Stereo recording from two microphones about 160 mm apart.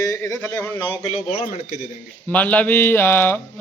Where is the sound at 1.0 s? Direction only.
40° left (ahead or behind).